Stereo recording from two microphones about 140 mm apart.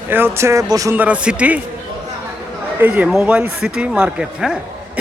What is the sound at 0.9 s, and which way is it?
Speech, 10° right (ahead or behind).